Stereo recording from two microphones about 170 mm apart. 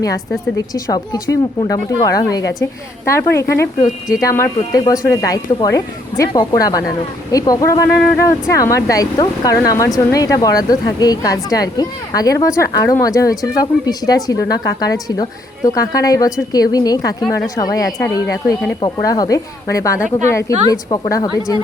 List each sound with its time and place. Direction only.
0.5 s speech: 20° left (ahead or behind)